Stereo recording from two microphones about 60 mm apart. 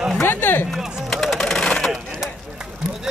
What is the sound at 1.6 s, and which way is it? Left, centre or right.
Wood, centre.